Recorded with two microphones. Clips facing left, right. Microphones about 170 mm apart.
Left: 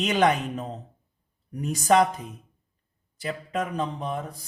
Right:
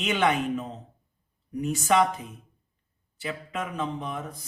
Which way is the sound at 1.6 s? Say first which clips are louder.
Left 2 dB; 40° left (ahead or behind).